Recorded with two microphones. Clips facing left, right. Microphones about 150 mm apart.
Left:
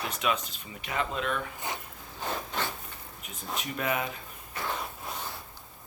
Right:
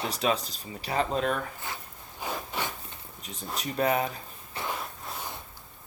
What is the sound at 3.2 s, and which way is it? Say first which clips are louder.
Speech: right 1 dB; 35° right (ahead or behind).